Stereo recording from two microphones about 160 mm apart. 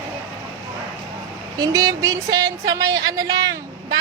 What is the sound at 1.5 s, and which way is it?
Speech, 25° right (ahead or behind).